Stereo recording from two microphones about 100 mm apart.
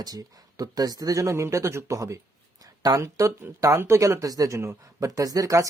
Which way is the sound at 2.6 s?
40° right (ahead or behind).